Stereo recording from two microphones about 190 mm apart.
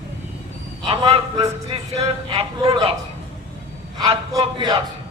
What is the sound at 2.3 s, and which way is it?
Speech, 30° right (ahead or behind).